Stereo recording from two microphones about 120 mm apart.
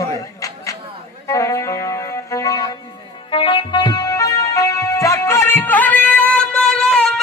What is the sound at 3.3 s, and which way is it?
Music, 45° left (ahead or behind).